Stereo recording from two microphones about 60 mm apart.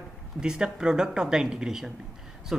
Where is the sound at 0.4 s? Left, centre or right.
Centre.